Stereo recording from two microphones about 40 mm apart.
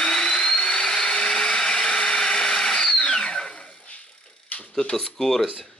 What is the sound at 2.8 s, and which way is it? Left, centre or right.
Drill, left.